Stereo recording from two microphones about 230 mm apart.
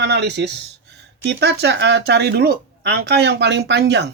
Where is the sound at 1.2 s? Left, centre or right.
Right.